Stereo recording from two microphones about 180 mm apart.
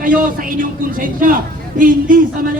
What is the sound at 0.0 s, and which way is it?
Speech, 50° right (ahead or behind).